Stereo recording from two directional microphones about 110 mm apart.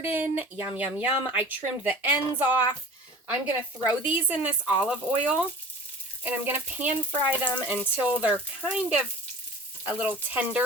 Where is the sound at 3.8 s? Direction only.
15° right (ahead or behind).